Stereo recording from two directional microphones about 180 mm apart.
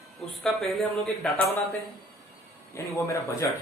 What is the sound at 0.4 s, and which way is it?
Speech, centre (ahead or behind).